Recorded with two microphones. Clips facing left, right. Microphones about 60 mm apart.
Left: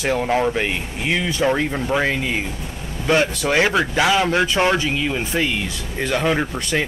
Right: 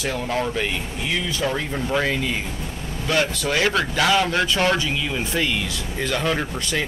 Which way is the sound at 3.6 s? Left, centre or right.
Centre.